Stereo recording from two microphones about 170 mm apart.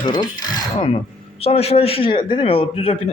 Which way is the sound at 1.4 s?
35° left (ahead or behind).